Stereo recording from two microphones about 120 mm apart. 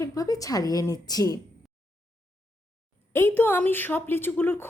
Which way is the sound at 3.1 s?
20° left (ahead or behind).